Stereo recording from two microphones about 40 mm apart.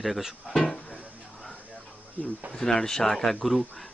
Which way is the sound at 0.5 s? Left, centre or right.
Centre.